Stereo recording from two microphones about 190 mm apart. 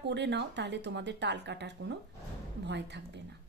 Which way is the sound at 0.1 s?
65° right (ahead or behind).